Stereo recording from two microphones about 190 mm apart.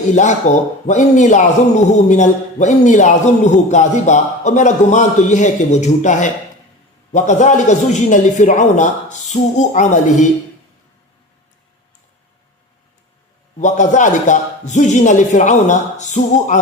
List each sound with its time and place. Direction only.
0.2 s a man's voice: 40° left (ahead or behind)
13.6 s a man's voice: 40° left (ahead or behind)